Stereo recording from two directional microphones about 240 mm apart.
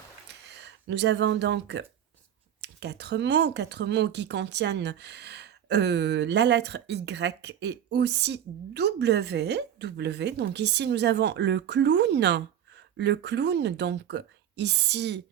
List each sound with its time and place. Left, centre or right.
0.9 s speech: right